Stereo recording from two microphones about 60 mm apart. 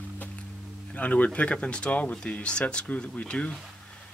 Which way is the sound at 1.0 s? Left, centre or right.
Left.